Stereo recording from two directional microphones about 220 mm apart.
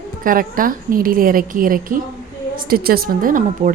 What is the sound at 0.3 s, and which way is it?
A woman's voice, 40° right (ahead or behind).